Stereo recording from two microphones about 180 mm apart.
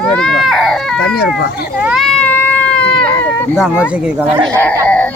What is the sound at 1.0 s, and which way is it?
Speech, 60° left (ahead or behind).